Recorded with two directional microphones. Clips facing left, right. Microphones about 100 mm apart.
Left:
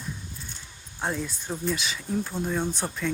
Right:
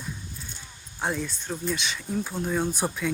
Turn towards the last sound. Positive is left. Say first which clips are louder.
# right 2 dB
turn(degrees=-10)  # may be behind; listen again after turning